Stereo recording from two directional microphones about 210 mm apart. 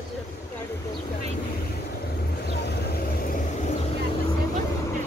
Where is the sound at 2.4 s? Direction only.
50° left (ahead or behind).